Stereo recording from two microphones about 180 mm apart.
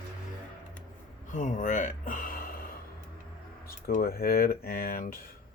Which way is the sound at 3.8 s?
55° left (ahead or behind).